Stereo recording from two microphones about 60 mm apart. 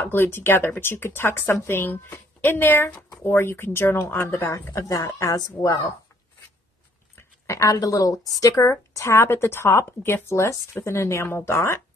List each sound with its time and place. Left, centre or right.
0.0 s speech: left
4.7 s speech: left
7.4 s a woman's voice: left